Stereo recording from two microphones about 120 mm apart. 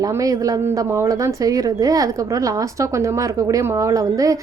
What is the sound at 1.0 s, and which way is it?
A woman's voice, 30° right (ahead or behind).